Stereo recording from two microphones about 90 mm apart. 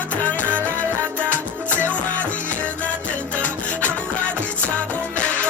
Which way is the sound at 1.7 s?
20° left (ahead or behind).